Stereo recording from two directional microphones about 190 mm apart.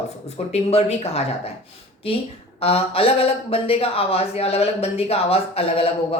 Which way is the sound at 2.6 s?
30° left (ahead or behind).